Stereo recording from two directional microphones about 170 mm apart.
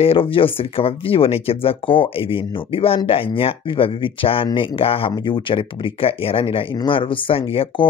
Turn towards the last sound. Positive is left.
turn(degrees=30)  # may be behind; listen again after turning